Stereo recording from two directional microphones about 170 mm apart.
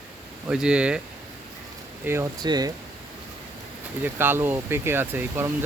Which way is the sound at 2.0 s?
15° right (ahead or behind).